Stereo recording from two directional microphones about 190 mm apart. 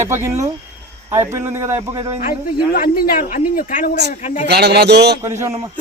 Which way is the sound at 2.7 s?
50° left (ahead or behind).